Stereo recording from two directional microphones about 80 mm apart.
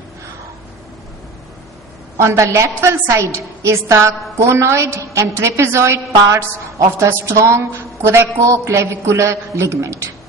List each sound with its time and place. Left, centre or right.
2.1 s a woman's voice: right